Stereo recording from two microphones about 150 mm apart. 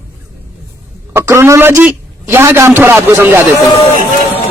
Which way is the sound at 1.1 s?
20° right (ahead or behind).